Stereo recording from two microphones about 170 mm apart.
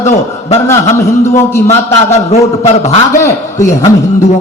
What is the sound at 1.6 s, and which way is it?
A man's voice, 40° left (ahead or behind).